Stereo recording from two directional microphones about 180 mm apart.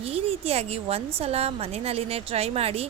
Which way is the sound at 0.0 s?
35° right (ahead or behind).